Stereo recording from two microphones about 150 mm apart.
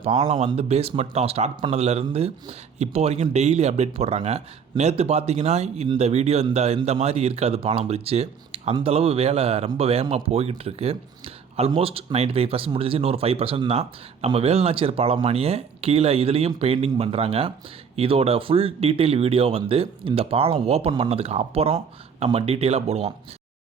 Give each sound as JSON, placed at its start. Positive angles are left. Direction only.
{"t": 0.0, "sound": "speech", "side_deg": -45}